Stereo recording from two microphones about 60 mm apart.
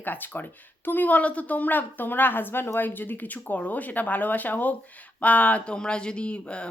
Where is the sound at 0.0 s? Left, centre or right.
Left.